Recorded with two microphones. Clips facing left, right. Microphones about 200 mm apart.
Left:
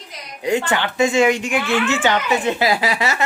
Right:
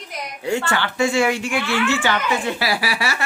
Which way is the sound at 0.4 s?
15° left (ahead or behind).